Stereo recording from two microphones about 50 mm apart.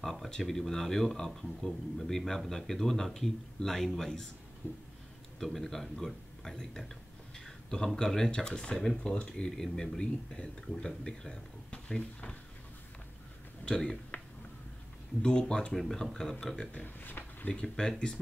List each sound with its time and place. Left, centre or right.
0.0 s speech: centre
4.6 s a sound: left
5.4 s speech: centre
13.7 s speech: centre
15.2 s speech: centre
15.7 s speech: centre
16.8 s speech: left
17.5 s speech: centre